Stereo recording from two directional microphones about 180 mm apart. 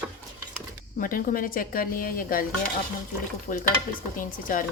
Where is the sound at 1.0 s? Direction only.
50° left (ahead or behind).